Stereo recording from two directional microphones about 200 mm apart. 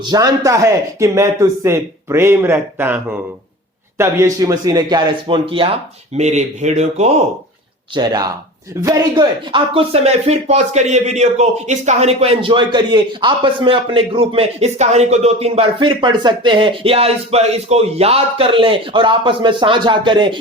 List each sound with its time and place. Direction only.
0.1 s a man's voice: 20° right (ahead or behind); by 7.1 s 35° right (ahead or behind)
7.9 s speech: 20° right (ahead or behind)